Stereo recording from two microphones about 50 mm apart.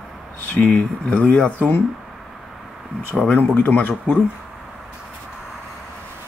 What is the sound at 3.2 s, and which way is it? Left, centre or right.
Speech, left.